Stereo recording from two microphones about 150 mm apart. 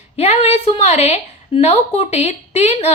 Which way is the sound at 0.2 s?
45° left (ahead or behind).